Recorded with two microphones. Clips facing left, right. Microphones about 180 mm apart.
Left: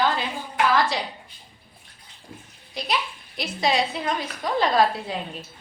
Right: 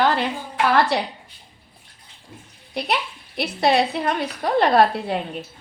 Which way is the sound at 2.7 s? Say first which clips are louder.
Right 3 dB; 60° right (ahead or behind).